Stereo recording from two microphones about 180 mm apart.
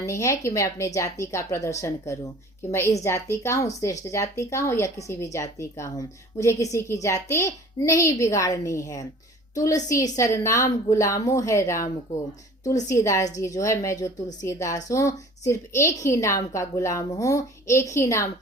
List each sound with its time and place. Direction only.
0.0 s a woman's voice: 15° left (ahead or behind)